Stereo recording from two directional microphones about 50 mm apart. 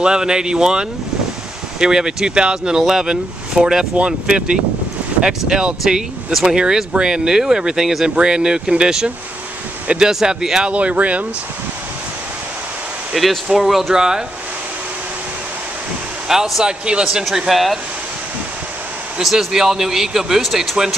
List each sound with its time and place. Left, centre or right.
0.0 s speech: centre
10.7 s speech: right
13.1 s speech: centre
16.3 s speech: centre
17.5 s speech: centre
19.2 s speech: centre